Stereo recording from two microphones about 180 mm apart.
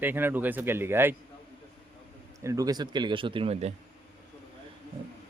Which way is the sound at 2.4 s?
20° right (ahead or behind).